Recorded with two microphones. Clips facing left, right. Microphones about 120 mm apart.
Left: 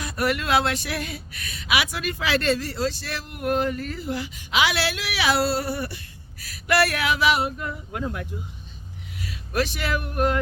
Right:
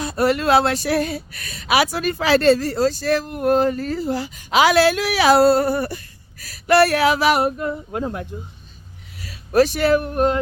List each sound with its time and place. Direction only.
0.0 s speech: 30° right (ahead or behind); by 6.0 s 45° right (ahead or behind)
6.4 s speech: 35° right (ahead or behind)